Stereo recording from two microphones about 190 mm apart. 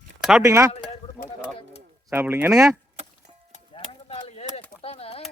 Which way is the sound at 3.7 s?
30° left (ahead or behind).